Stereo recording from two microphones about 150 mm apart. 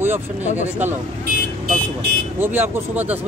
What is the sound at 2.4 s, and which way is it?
Speech, 15° right (ahead or behind).